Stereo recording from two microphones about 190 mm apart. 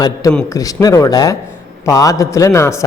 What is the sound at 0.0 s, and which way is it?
A man's voice, 20° left (ahead or behind).